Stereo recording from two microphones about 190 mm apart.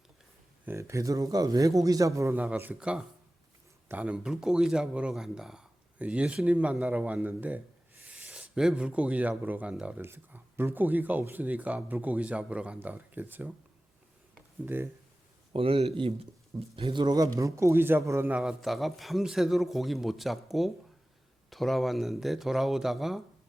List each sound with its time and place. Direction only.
0.6 s a man's voice: 15° right (ahead or behind)
14.6 s a man's voice: 10° right (ahead or behind)
15.5 s speech: 30° right (ahead or behind); by 23.2 s centre (ahead or behind)